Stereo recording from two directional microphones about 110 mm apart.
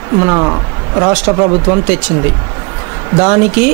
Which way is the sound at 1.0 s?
20° right (ahead or behind).